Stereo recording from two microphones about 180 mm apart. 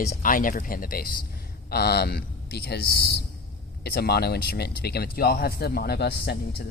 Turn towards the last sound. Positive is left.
turn(degrees=65)  # may be behind; listen again after turning